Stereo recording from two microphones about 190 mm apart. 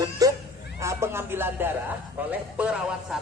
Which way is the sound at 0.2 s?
20° right (ahead or behind).